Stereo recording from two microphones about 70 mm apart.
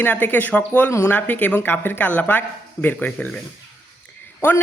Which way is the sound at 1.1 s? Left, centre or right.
Left.